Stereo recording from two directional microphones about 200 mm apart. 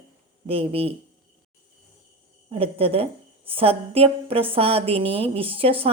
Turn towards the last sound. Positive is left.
turn(degrees=-30)  # may be behind; listen again after turning